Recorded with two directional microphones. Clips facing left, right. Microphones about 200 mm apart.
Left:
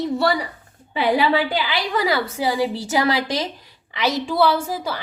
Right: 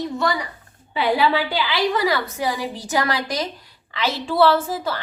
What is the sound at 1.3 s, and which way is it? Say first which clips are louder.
Speech: left 2 dB; 45° left (ahead or behind).